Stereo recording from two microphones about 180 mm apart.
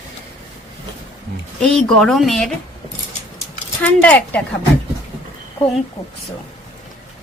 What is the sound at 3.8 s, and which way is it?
Speech, 5° left (ahead or behind).